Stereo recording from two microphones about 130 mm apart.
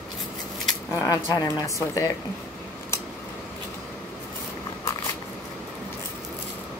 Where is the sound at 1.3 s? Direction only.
35° left (ahead or behind).